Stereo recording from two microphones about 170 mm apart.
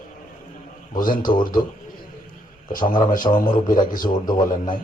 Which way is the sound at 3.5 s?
25° left (ahead or behind).